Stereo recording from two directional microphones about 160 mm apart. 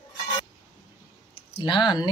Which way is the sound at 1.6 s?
30° left (ahead or behind).